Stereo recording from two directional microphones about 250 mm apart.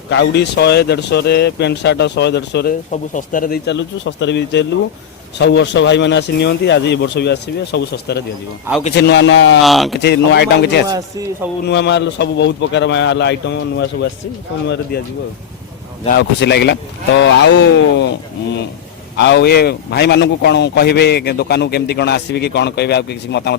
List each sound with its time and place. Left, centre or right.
0.1 s speech: left
2.9 s speech: left
9.6 s speech: centre
10.0 s a man's voice: left
16.1 s speech: left
19.1 s a man's voice: left